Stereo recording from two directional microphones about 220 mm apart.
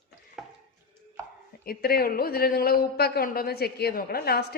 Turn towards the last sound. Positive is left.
turn(degrees=45)  # may be behind; listen again after turning